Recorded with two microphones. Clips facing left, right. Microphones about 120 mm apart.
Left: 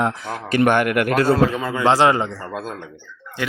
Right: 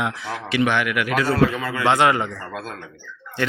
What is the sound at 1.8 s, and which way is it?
Speech, 30° left (ahead or behind).